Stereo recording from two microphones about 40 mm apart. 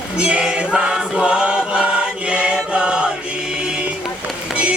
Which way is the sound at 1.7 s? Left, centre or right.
Right.